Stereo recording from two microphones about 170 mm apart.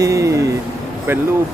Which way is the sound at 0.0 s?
20° right (ahead or behind).